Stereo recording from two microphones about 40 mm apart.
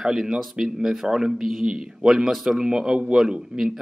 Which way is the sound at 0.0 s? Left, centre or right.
Centre.